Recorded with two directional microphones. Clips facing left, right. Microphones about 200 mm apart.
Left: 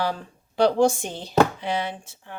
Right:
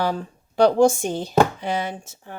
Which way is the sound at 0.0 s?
45° right (ahead or behind).